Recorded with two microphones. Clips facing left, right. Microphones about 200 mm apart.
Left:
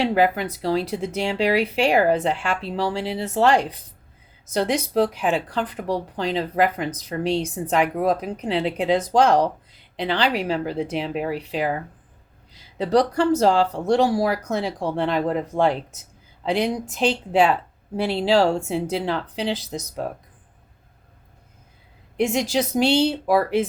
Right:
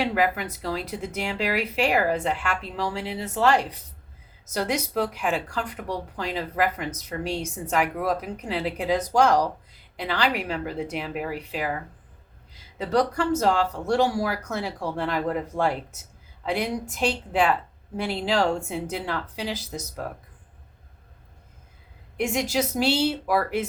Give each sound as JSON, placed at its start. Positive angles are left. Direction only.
{"t": 0.0, "sound": "speech", "side_deg": 30}
{"t": 12.8, "sound": "speech", "side_deg": 30}
{"t": 22.4, "sound": "speech", "side_deg": 30}